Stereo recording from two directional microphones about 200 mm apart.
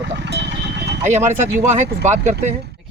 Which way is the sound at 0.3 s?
60° right (ahead or behind).